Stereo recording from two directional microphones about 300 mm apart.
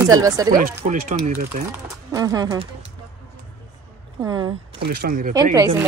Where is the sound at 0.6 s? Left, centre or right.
Right.